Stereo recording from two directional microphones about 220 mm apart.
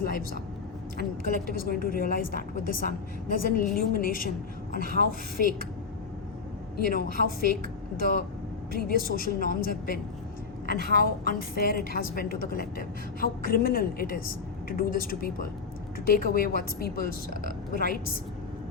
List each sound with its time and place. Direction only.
0.0 s speech: 40° left (ahead or behind)
1.6 s a woman's voice: 40° left (ahead or behind)
6.7 s a woman's voice: 40° left (ahead or behind)